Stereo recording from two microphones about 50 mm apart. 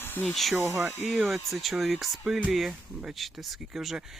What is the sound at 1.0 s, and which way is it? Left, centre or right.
Speech, centre.